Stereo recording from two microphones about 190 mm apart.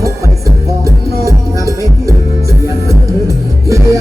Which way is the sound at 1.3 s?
15° right (ahead or behind).